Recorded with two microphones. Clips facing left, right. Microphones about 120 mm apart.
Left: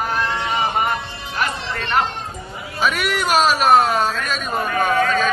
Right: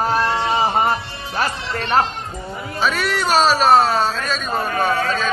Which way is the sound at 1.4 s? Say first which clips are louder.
Right 1 dB; 35° right (ahead or behind).